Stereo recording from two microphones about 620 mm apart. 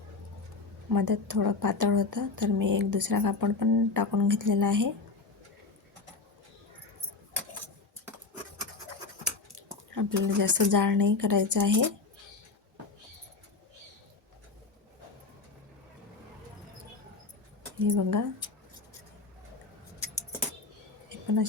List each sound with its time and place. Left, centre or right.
0.9 s a woman's voice: right
9.6 s a woman's voice: right
17.7 s speech: right
21.1 s a sound: right